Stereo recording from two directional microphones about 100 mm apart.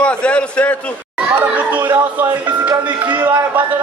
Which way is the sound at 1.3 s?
15° right (ahead or behind).